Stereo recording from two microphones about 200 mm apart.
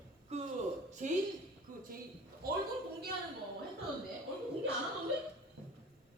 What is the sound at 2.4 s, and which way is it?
Speech, 50° right (ahead or behind).